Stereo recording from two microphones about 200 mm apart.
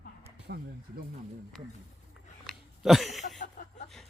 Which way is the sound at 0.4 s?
50° right (ahead or behind).